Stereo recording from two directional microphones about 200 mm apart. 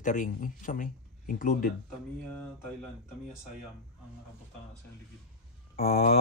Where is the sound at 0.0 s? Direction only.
40° left (ahead or behind).